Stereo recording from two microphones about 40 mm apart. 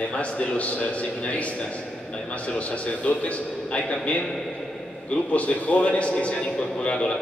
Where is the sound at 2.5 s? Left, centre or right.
Left.